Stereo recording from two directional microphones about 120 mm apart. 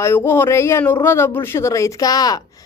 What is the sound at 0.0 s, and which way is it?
Speech, 20° left (ahead or behind).